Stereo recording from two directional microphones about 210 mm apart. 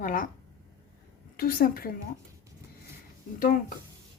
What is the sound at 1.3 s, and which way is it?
Speech, 45° left (ahead or behind).